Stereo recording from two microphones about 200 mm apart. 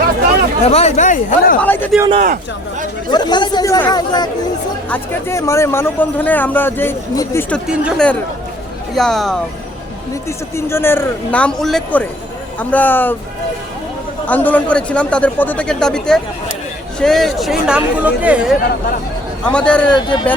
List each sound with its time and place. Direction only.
0.6 s speech: 30° left (ahead or behind)
1.6 s speech: 10° left (ahead or behind)
2.2 s speech: 40° right (ahead or behind)
3.1 s speech: 20° left (ahead or behind)
7.7 s a man's voice: 5° right (ahead or behind)
10.2 s speech: 15° left (ahead or behind)
14.3 s a man's voice: 10° left (ahead or behind)
19.5 s a man's voice: 5° left (ahead or behind)
19.9 s speech: 20° left (ahead or behind)